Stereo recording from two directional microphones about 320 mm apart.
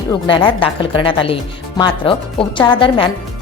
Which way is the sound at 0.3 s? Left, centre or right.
Centre.